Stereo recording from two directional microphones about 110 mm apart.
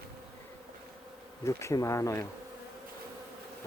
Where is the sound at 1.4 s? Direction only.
25° left (ahead or behind).